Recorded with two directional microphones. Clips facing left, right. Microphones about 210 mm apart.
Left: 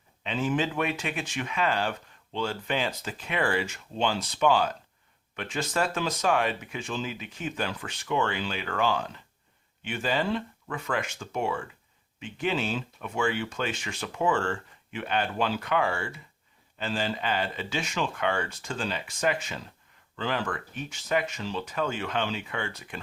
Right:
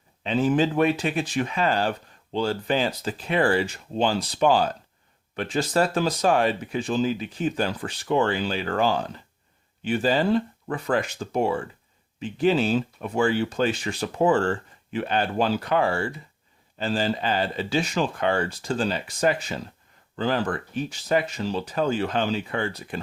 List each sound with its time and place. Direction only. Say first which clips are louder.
0.2 s speech: right 6 dB; 35° right (ahead or behind)